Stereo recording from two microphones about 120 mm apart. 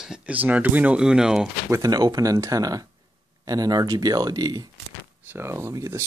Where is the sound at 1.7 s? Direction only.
30° right (ahead or behind).